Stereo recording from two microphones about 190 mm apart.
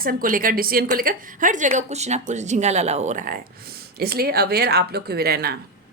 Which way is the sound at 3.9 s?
55° right (ahead or behind).